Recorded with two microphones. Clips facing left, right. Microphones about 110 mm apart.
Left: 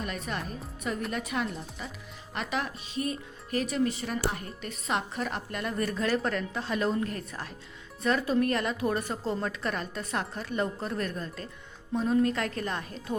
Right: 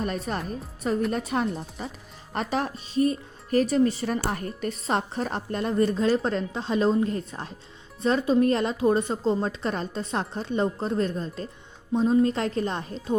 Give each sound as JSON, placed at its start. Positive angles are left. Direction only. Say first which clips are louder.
{"t": 0.0, "sound": "a woman's voice", "louder": "right 5 dB", "side_deg": -35}